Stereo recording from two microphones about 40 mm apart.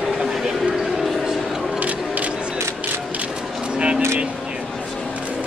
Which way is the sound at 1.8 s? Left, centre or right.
Right.